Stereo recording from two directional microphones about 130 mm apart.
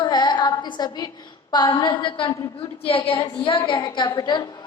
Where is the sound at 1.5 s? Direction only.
35° left (ahead or behind).